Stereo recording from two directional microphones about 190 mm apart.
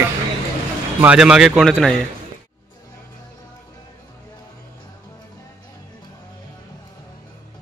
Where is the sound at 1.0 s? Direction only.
5° right (ahead or behind).